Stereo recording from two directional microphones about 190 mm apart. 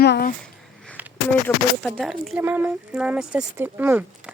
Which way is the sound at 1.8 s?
Centre (ahead or behind).